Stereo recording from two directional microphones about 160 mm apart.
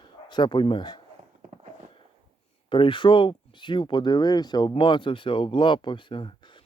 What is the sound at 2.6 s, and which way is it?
Speech, 30° left (ahead or behind).